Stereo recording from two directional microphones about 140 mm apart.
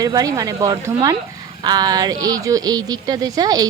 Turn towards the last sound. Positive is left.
turn(degrees=-25)  # may be behind; listen again after turning